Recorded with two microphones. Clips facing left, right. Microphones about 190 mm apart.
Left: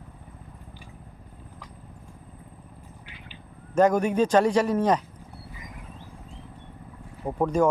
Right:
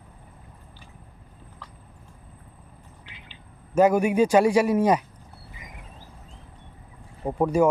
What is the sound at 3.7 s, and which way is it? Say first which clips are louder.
Speech: right 2 dB; 10° right (ahead or behind).